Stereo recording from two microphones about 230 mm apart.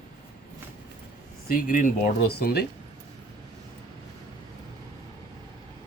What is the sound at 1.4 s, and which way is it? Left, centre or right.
A man's voice, left.